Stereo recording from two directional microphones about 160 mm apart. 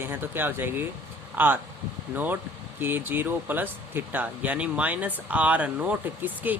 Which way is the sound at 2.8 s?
10° right (ahead or behind).